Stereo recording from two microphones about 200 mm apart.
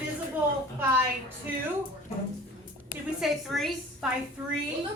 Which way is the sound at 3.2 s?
Centre (ahead or behind).